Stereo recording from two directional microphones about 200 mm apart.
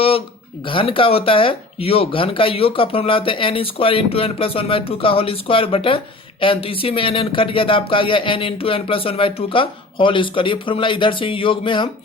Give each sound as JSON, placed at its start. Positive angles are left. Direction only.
{"t": 0.6, "sound": "speech", "side_deg": 25}